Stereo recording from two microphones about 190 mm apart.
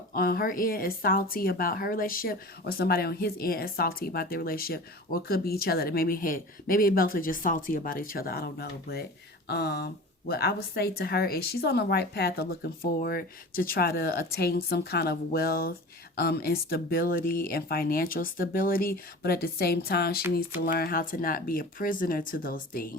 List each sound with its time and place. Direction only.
0.1 s speech: 50° left (ahead or behind)